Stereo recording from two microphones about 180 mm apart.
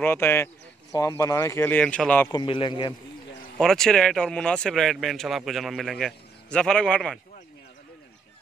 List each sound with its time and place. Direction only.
0.0 s speech: 15° left (ahead or behind)
2.2 s a man's voice: 25° left (ahead or behind)
3.5 s speech: 5° left (ahead or behind)